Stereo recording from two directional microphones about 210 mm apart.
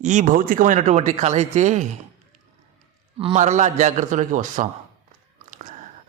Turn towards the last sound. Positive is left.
turn(degrees=-40)  # may be behind; listen again after turning